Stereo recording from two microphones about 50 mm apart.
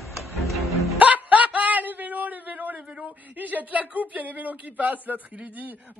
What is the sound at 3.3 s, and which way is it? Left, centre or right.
A man's voice, right.